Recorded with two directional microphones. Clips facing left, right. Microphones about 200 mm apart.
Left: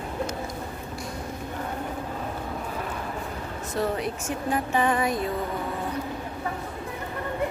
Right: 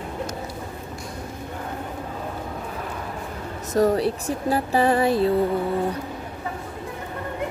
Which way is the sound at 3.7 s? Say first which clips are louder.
Right 8 dB; 40° right (ahead or behind).